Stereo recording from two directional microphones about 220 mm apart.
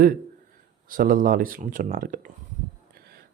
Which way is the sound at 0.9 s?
40° right (ahead or behind).